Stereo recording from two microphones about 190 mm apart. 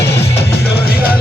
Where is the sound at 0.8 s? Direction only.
55° left (ahead or behind).